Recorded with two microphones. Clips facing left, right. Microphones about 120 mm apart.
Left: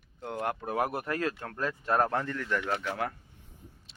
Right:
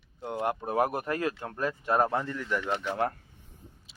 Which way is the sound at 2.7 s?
20° right (ahead or behind).